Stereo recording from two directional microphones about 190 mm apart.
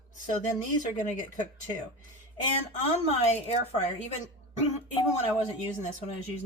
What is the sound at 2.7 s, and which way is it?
Speech, 35° left (ahead or behind).